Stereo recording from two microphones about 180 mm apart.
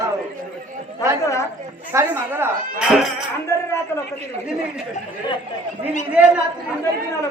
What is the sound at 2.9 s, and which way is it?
Music, centre (ahead or behind).